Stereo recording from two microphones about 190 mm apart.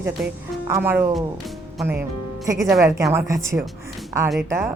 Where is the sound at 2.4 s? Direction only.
15° right (ahead or behind).